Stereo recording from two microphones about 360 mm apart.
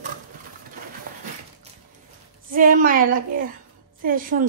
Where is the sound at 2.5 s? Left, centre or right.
Right.